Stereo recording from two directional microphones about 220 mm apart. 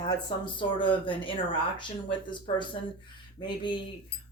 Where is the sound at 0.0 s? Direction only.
20° left (ahead or behind).